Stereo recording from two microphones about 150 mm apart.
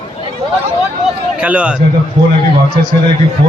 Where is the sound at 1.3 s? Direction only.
10° right (ahead or behind).